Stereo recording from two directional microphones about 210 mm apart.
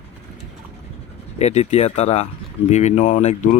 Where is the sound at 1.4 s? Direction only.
30° left (ahead or behind).